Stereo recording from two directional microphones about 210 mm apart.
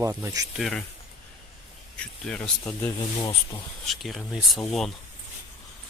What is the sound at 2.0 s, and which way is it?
Speech, 5° left (ahead or behind).